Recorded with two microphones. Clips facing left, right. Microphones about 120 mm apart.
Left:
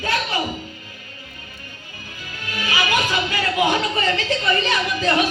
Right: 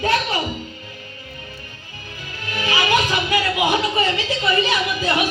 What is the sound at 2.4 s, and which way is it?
Music, 25° right (ahead or behind).